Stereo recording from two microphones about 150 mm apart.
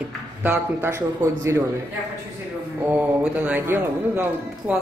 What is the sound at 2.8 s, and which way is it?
Speech, 10° right (ahead or behind).